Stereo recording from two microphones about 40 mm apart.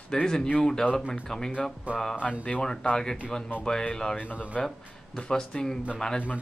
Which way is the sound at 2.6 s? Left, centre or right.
Centre.